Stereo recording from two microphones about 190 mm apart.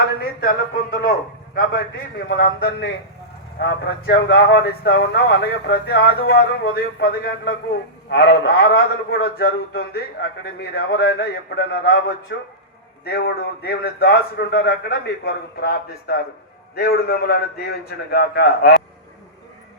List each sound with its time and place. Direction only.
1.5 s a man's voice: 50° left (ahead or behind)